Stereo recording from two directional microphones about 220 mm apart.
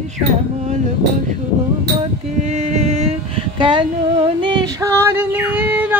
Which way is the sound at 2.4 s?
30° right (ahead or behind).